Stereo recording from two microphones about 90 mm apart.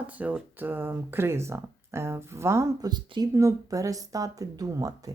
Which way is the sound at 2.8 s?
50° right (ahead or behind).